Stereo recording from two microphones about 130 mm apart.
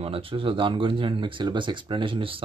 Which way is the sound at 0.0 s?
45° right (ahead or behind).